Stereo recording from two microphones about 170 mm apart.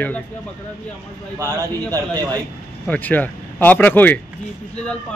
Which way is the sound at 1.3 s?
15° right (ahead or behind).